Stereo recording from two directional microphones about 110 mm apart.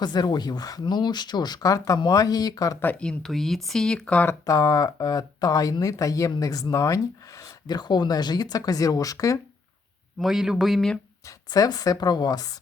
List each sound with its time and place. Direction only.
0.0 s speech: 40° left (ahead or behind)
2.8 s speech: 10° left (ahead or behind)
4.4 s speech: 35° left (ahead or behind)
10.2 s speech: 5° right (ahead or behind)
11.3 s speech: 35° left (ahead or behind)